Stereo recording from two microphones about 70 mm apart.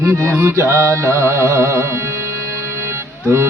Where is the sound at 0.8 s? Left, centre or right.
Right.